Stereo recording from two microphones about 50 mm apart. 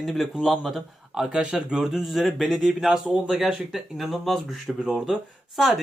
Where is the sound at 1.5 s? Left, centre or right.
Centre.